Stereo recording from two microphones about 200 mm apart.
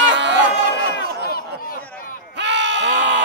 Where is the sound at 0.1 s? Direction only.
65° right (ahead or behind).